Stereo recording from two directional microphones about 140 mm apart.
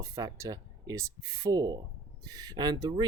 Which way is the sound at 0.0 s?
25° right (ahead or behind).